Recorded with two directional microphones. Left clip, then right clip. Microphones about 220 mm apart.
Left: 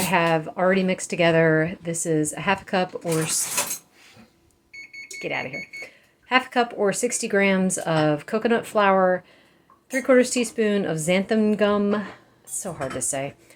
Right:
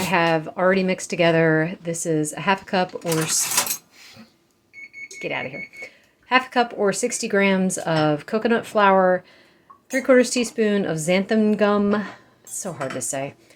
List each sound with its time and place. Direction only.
0.0 s speech: 5° right (ahead or behind)
5.2 s speech: centre (ahead or behind)